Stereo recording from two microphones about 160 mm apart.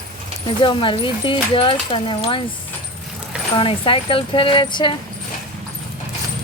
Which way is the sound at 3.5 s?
35° left (ahead or behind).